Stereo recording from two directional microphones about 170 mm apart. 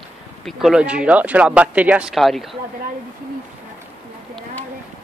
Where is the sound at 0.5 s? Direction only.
5° right (ahead or behind).